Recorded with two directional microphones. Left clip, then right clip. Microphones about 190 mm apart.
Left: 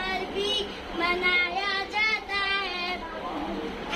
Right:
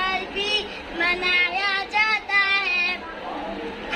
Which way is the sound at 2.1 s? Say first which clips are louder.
Right 7 dB; 5° right (ahead or behind).